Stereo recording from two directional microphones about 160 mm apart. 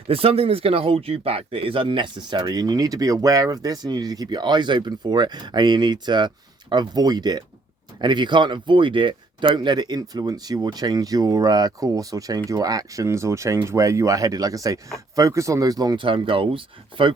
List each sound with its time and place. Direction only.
0.1 s speech: 35° right (ahead or behind)